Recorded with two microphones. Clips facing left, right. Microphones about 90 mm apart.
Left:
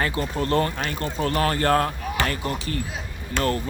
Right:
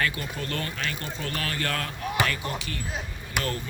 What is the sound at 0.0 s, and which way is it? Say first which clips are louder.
Speech: left 5 dB; 35° left (ahead or behind).